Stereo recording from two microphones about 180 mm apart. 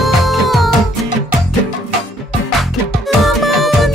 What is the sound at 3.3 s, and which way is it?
Music, centre (ahead or behind).